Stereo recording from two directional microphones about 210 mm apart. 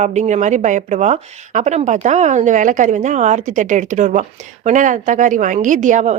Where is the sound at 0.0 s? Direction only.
35° right (ahead or behind).